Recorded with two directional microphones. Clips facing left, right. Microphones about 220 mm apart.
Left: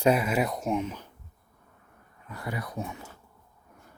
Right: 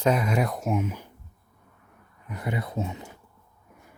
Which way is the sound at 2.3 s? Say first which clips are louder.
Right 4 dB; 20° right (ahead or behind).